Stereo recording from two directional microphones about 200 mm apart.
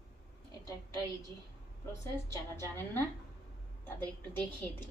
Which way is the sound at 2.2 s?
15° left (ahead or behind).